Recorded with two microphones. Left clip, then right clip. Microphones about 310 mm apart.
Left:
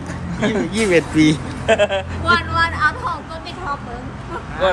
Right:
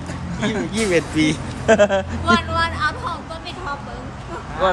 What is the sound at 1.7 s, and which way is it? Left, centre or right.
Speech, right.